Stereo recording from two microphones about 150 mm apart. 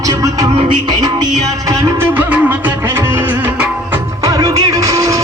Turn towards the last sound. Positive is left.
turn(degrees=-20)  # may be behind; listen again after turning